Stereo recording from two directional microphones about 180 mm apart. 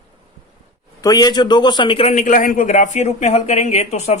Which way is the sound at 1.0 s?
20° left (ahead or behind).